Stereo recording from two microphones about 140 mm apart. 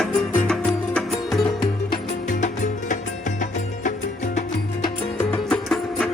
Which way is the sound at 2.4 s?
65° left (ahead or behind).